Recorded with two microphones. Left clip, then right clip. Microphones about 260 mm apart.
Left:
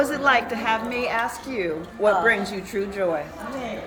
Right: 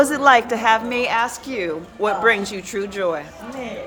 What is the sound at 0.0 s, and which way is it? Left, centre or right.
A woman's voice, right.